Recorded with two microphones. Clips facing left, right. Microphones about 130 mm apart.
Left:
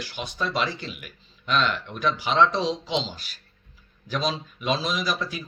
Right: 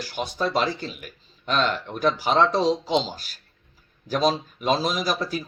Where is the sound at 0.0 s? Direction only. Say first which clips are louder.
Right 4 dB; 40° right (ahead or behind).